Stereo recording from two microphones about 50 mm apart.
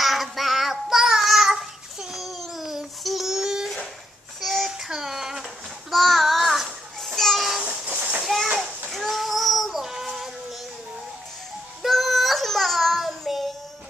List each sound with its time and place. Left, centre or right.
0.0 s child singing: centre
7.9 s children playing: right
8.9 s child singing: centre
11.8 s child singing: centre